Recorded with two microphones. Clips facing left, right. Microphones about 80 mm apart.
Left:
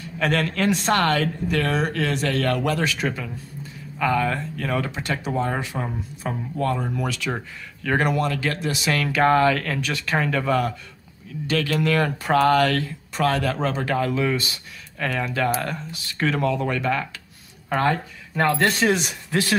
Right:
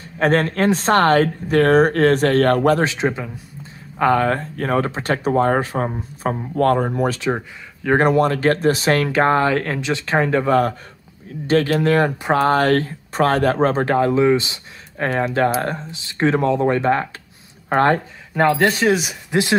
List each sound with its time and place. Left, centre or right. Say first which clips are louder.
0.0 s speech: right 6 dB; right
2.9 s speech: right 5 dB; right
4.0 s speech: right 6 dB; right
6.5 s speech: right 9 dB; right
6.9 s speech: right 7 dB; right
15.0 s speech: right 5 dB; right
18.5 s speech: right 3 dB; centre